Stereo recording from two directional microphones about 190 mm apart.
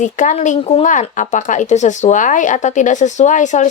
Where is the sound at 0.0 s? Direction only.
40° left (ahead or behind).